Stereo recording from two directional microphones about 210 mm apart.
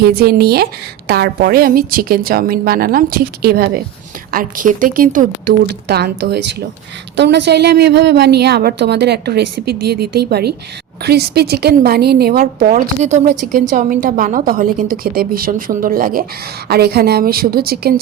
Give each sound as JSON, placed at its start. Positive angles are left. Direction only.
{"t": 0.0, "sound": "a woman's voice", "side_deg": -50}